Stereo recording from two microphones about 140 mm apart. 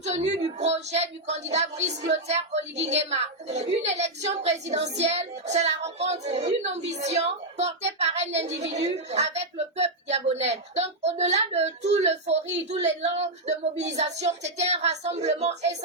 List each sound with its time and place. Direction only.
0.0 s a woman's voice: 50° right (ahead or behind)